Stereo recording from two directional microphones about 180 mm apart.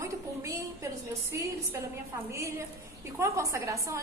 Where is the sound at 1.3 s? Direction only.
15° right (ahead or behind).